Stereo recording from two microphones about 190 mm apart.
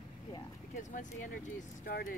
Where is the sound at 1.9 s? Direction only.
50° left (ahead or behind).